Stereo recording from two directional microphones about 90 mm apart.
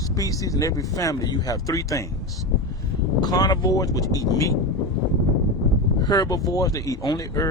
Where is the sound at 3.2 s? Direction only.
50° left (ahead or behind).